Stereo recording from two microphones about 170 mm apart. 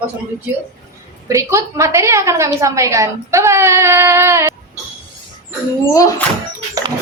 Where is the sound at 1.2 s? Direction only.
15° right (ahead or behind).